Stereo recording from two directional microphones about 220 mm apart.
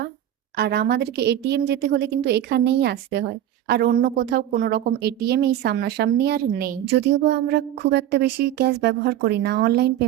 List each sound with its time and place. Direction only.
0.5 s speech: 45° right (ahead or behind)